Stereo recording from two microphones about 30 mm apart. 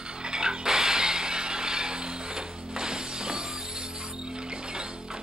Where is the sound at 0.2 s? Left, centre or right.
Right.